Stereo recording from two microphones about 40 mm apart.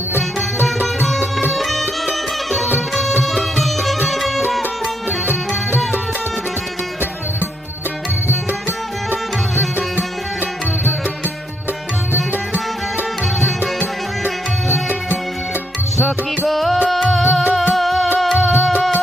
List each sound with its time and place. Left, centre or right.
0.2 s music: centre
5.0 s music: right
16.0 s music: centre